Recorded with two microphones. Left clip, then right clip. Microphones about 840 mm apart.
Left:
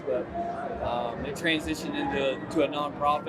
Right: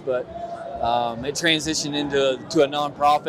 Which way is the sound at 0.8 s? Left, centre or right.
Right.